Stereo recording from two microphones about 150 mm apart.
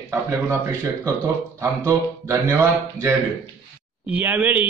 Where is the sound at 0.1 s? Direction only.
15° right (ahead or behind).